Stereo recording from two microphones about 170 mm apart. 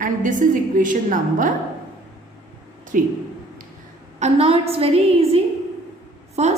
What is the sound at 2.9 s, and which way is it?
Speech, 50° right (ahead or behind).